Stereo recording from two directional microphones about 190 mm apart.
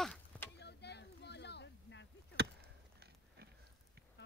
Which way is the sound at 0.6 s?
60° left (ahead or behind).